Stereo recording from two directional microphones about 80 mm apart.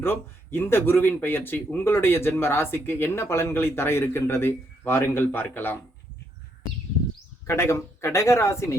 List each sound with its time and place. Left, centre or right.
0.0 s speech: left
7.4 s speech: left